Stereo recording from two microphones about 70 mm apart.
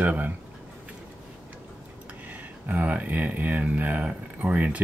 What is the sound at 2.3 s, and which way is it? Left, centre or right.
Speech, right.